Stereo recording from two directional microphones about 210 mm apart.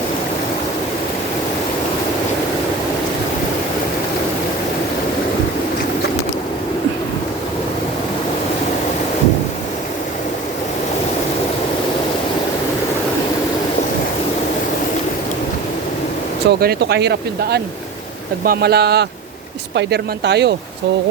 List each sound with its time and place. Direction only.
16.5 s speech: 50° right (ahead or behind)